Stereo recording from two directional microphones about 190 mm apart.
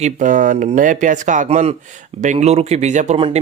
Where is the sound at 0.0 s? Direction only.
45° right (ahead or behind).